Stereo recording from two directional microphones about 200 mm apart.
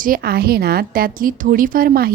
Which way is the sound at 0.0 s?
45° right (ahead or behind).